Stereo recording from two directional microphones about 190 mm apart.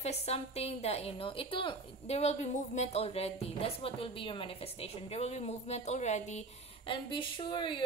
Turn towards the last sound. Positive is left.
turn(degrees=25)  # may be behind; listen again after turning